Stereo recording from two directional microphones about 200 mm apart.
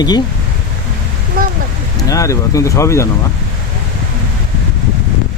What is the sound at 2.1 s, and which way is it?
Speech, 15° left (ahead or behind).